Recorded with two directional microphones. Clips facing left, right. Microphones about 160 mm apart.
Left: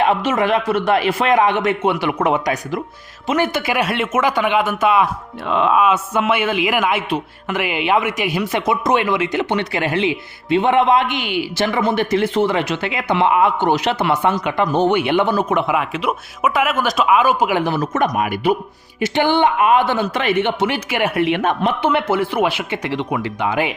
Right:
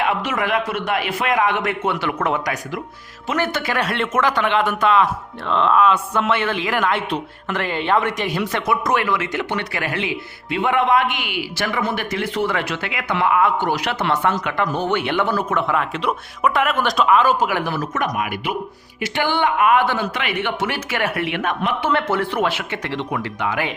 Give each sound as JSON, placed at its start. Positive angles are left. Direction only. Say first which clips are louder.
{"t": 0.1, "sound": "a man's voice", "louder": "left 5 dB", "side_deg": 25}
{"t": 14.0, "sound": "speech", "louder": "left 3 dB", "side_deg": 10}
{"t": 18.1, "sound": "a man's voice", "louder": "left 6 dB", "side_deg": 35}
{"t": 20.1, "sound": "a man's voice", "louder": "left 6 dB", "side_deg": 35}
{"t": 20.6, "sound": "a man's voice", "louder": "left 4 dB", "side_deg": 15}
{"t": 21.8, "sound": "speech", "louder": "left 2 dB", "side_deg": 15}